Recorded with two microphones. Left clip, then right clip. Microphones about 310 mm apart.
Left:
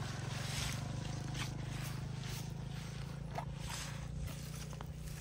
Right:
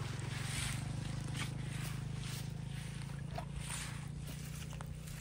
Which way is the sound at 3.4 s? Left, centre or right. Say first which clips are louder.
Left 1 dB; centre.